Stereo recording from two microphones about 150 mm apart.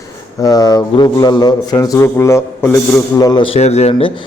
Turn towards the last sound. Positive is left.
turn(degrees=45)  # may be behind; listen again after turning